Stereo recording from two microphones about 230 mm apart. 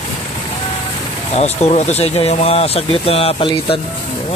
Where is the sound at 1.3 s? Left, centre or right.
Left.